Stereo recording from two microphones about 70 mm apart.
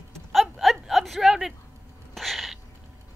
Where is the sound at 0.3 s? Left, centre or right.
Centre.